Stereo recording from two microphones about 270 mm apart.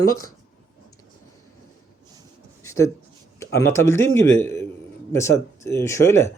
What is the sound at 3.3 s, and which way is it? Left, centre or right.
Speech, centre.